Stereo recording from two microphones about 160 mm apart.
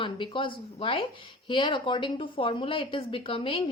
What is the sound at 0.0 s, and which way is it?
A woman's voice, 30° left (ahead or behind).